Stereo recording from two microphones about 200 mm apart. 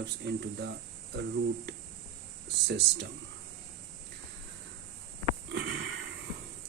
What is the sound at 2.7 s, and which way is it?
Speech, 55° right (ahead or behind).